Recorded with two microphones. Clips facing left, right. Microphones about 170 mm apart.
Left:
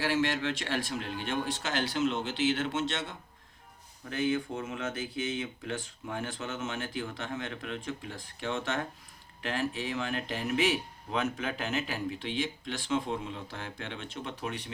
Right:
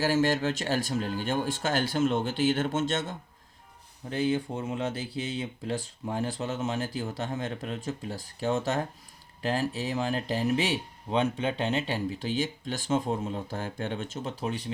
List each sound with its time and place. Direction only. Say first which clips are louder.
0.0 s speech: right 4 dB; 40° right (ahead or behind)
4.1 s speech: right 2 dB; 30° right (ahead or behind)